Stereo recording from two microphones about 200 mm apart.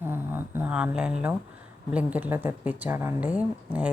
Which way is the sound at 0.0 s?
10° right (ahead or behind).